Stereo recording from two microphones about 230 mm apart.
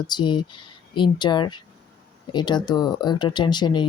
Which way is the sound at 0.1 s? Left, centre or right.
Centre.